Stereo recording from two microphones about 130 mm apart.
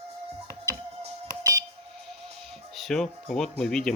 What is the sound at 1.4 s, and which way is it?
Music, 25° right (ahead or behind).